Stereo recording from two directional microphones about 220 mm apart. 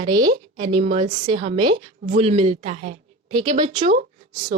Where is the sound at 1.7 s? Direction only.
30° right (ahead or behind).